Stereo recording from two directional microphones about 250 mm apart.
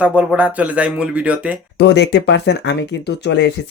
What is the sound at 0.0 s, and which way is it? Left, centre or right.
Speech, centre.